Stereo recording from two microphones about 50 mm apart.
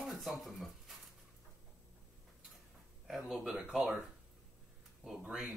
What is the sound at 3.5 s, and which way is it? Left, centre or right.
Speech, centre.